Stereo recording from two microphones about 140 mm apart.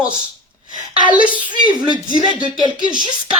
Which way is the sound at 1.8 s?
30° right (ahead or behind).